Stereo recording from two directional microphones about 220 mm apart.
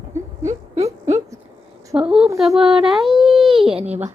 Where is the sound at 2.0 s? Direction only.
5° right (ahead or behind).